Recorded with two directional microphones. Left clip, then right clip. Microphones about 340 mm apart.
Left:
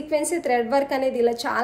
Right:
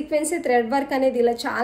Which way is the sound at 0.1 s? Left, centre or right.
Centre.